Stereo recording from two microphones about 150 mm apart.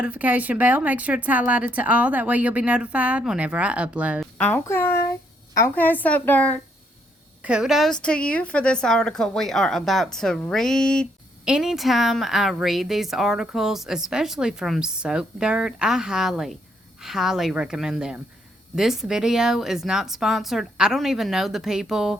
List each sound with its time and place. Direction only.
0.0 s speech: 10° right (ahead or behind)
4.4 s a woman's voice: 10° left (ahead or behind)
7.4 s a woman's voice: 5° right (ahead or behind)